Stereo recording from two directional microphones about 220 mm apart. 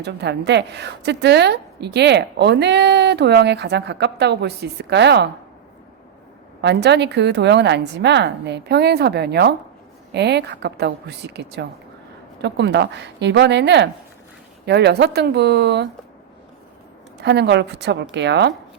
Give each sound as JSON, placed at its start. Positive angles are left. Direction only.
{"t": 0.0, "sound": "a woman's voice", "side_deg": -50}
{"t": 6.6, "sound": "a woman's voice", "side_deg": -50}
{"t": 17.2, "sound": "a woman's voice", "side_deg": -50}